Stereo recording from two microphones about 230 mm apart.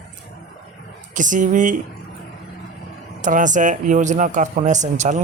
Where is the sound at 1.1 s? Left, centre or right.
Right.